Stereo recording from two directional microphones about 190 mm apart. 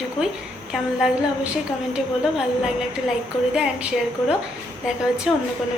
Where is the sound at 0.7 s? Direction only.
Centre (ahead or behind).